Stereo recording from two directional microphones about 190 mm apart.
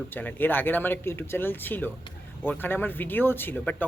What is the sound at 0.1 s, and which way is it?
Speech, 10° left (ahead or behind).